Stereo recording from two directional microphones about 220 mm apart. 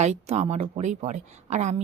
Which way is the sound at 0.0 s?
30° right (ahead or behind).